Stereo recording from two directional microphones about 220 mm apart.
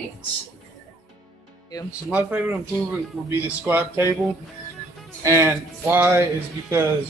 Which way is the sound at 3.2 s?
5° right (ahead or behind).